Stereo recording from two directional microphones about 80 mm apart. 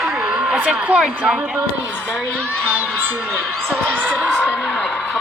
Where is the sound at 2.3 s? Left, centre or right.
Right.